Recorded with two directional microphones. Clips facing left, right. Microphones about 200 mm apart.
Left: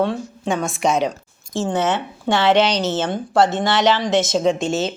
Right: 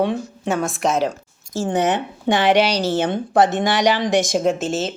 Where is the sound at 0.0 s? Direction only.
15° right (ahead or behind).